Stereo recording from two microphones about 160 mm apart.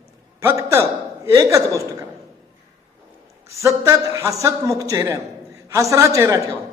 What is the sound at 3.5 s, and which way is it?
A man's voice, 15° right (ahead or behind).